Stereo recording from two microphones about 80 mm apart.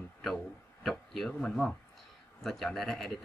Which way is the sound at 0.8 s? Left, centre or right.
Centre.